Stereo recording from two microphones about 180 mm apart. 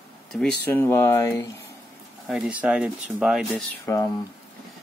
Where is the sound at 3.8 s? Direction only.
20° left (ahead or behind).